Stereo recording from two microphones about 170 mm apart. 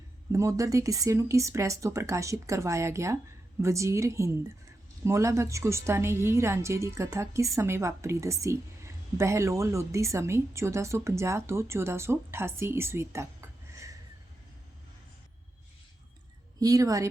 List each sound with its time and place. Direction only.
0.3 s a woman's voice: 20° right (ahead or behind)
16.6 s speech: 20° right (ahead or behind)